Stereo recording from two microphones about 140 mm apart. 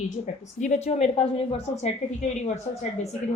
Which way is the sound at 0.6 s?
55° left (ahead or behind).